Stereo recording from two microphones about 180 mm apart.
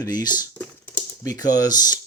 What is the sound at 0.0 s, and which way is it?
Speech, 20° left (ahead or behind).